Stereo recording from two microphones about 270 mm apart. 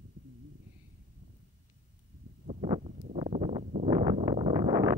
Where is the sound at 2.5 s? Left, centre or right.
Centre.